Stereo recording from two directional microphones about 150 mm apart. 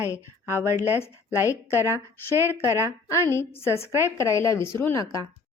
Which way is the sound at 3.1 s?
15° left (ahead or behind).